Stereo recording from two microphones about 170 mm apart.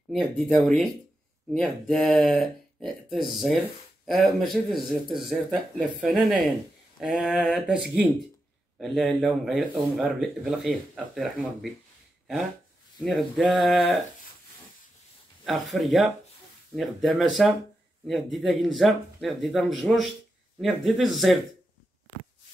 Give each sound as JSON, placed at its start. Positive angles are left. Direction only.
{"t": 0.1, "sound": "speech", "side_deg": 0}
{"t": 13.0, "sound": "speech", "side_deg": 0}
{"t": 15.4, "sound": "speech", "side_deg": 0}